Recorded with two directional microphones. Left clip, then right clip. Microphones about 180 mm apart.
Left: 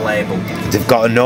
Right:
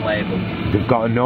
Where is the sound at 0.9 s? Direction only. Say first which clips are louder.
Left 7 dB; 25° left (ahead or behind).